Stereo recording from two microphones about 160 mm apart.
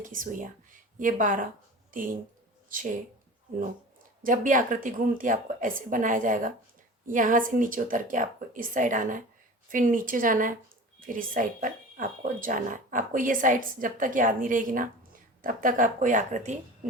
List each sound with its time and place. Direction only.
0.0 s speech: 55° right (ahead or behind)
2.6 s speech: 55° right (ahead or behind)
4.2 s speech: 55° right (ahead or behind)